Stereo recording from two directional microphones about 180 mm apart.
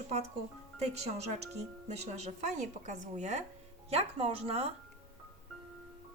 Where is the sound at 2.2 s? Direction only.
40° right (ahead or behind).